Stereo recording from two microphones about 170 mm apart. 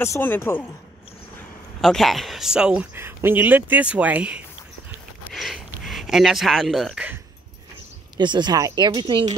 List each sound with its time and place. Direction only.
0.0 s speech: 15° left (ahead or behind)
1.8 s speech: centre (ahead or behind)
8.2 s speech: 25° right (ahead or behind)